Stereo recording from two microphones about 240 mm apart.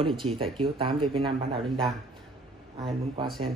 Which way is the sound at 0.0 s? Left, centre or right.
Centre.